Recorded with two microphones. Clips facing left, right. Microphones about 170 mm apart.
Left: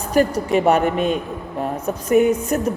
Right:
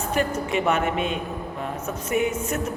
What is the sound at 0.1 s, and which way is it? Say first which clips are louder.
A woman's voice: left 8 dB; 40° left (ahead or behind).